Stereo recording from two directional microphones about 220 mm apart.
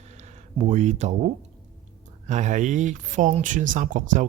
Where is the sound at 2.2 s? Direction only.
35° right (ahead or behind).